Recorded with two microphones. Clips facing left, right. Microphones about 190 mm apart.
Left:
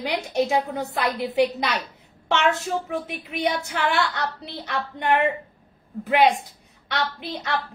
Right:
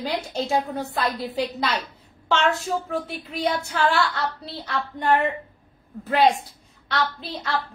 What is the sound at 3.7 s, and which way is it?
A woman's voice, 20° left (ahead or behind).